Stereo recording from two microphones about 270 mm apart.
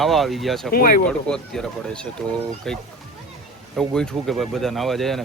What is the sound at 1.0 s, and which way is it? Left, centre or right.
Speech, centre.